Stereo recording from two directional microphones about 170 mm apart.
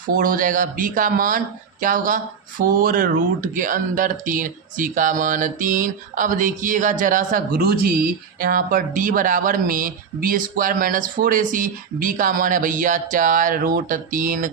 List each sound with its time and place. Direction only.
0.1 s speech: 55° right (ahead or behind)